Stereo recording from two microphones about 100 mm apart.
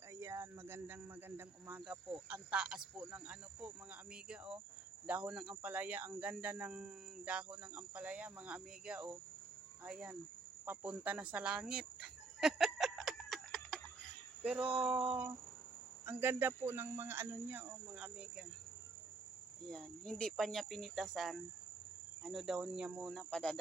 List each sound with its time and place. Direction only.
0.1 s cricket: 30° right (ahead or behind)
1.8 s cricket: 10° right (ahead or behind)
14.4 s cricket: 10° right (ahead or behind)
16.0 s speech: 20° right (ahead or behind)
19.6 s cricket: 5° left (ahead or behind)